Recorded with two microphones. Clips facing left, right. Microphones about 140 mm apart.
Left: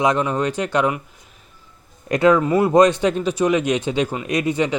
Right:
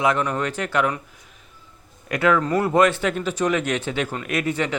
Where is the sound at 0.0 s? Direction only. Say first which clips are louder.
Left 3 dB; 20° left (ahead or behind).